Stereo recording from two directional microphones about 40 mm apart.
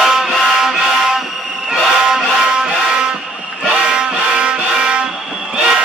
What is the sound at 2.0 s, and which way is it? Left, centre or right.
Music, centre.